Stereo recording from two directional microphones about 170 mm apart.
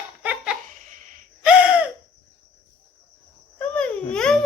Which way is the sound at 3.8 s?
5° left (ahead or behind).